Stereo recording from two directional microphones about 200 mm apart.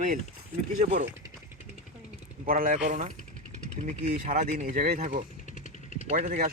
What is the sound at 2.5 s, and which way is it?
Speech, 40° right (ahead or behind).